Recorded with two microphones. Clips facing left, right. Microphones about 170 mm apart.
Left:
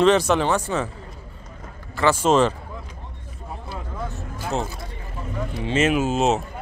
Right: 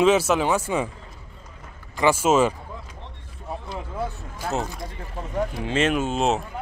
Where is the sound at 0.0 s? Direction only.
5° right (ahead or behind).